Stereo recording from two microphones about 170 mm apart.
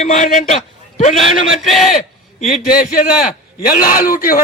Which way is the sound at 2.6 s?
55° left (ahead or behind).